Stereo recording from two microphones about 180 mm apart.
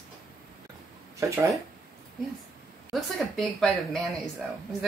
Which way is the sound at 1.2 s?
15° right (ahead or behind).